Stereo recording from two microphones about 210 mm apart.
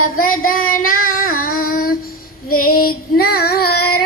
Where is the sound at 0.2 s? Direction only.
40° left (ahead or behind).